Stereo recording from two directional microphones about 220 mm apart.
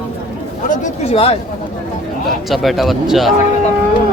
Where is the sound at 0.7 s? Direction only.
25° left (ahead or behind).